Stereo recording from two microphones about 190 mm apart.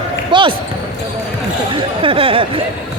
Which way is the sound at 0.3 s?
25° right (ahead or behind).